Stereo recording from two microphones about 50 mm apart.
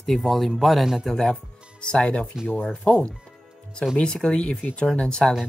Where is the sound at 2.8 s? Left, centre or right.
Left.